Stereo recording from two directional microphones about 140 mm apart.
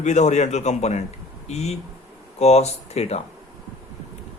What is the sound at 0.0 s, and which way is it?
A man's voice, 55° left (ahead or behind).